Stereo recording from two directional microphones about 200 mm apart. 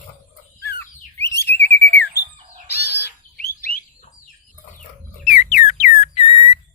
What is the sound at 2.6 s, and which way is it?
Bird, 50° left (ahead or behind).